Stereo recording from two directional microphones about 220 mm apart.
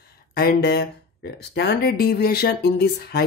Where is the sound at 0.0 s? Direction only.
45° left (ahead or behind).